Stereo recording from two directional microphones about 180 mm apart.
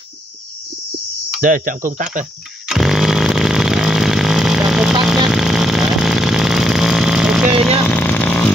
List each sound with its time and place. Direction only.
1.4 s speech: 50° right (ahead or behind)
2.7 s chainsaw: centre (ahead or behind)
5.0 s vehicle: centre (ahead or behind)
7.8 s vehicle: 10° left (ahead or behind)